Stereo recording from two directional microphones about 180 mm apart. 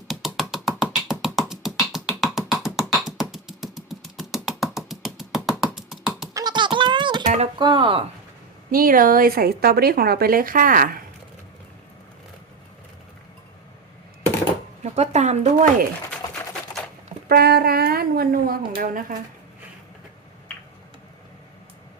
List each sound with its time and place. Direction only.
0.1 s music: centre (ahead or behind)
1.2 s beatboxing: centre (ahead or behind)
6.3 s music: 25° right (ahead or behind)
7.6 s speech: 25° right (ahead or behind)
8.7 s speech: 50° right (ahead or behind)
14.8 s speech: 35° right (ahead or behind)
16.2 s a sound: 20° left (ahead or behind)
17.2 s speech: 60° right (ahead or behind)